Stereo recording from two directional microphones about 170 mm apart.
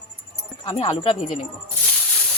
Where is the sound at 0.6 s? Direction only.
30° left (ahead or behind).